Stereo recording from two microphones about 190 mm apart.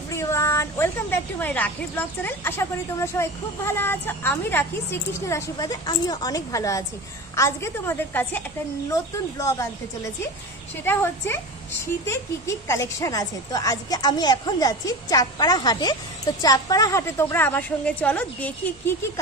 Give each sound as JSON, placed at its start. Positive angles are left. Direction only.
{"t": 0.1, "sound": "a woman's voice", "side_deg": 15}
{"t": 12.6, "sound": "a woman's voice", "side_deg": 15}